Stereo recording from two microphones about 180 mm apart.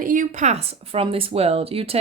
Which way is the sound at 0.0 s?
45° right (ahead or behind).